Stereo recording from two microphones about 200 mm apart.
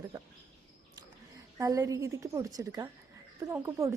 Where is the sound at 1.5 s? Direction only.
15° right (ahead or behind).